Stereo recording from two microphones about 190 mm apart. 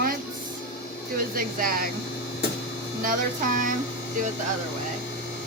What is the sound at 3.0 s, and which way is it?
Speech, 45° right (ahead or behind).